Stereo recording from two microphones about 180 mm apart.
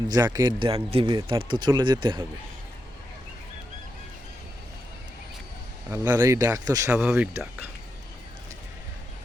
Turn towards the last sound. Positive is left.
turn(degrees=-10)  # may be behind; listen again after turning